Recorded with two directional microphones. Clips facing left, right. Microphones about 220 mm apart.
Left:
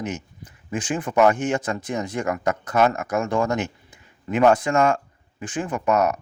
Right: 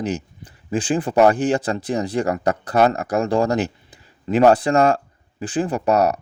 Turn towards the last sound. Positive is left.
turn(degrees=-35)  # may be behind; listen again after turning